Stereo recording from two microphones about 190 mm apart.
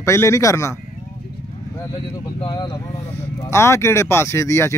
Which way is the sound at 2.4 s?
25° left (ahead or behind).